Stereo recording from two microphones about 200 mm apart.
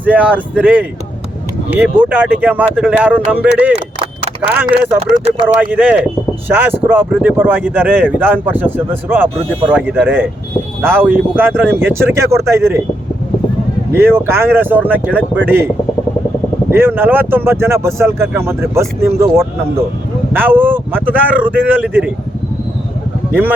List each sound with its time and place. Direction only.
0.0 s speech: 10° right (ahead or behind)
4.9 s speech: 30° right (ahead or behind)
5.5 s speech: 5° right (ahead or behind)
13.9 s speech: 10° right (ahead or behind)
16.7 s speech: 10° right (ahead or behind)